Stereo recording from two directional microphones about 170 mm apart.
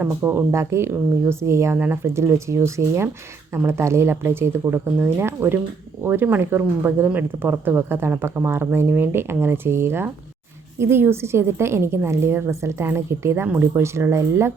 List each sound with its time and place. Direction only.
0.0 s speech: 10° right (ahead or behind)